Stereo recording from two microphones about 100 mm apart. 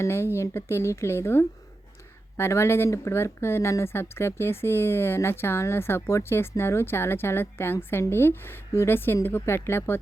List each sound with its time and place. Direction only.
0.0 s speech: 25° left (ahead or behind)